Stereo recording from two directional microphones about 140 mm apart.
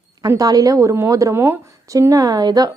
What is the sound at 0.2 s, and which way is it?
A woman's voice, 25° right (ahead or behind).